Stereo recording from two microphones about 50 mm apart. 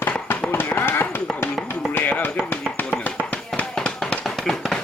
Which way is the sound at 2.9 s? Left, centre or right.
Left.